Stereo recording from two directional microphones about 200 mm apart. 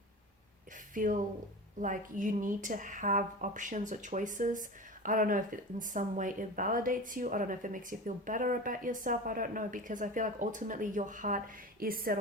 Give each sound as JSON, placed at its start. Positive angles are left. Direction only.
{"t": 0.9, "sound": "speech", "side_deg": -40}